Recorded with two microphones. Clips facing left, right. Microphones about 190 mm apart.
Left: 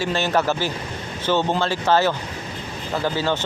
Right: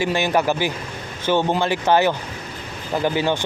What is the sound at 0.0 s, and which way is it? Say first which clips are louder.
Speech: right 2 dB; 15° right (ahead or behind).